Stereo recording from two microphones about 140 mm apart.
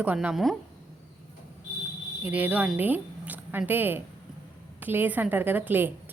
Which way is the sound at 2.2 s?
10° right (ahead or behind).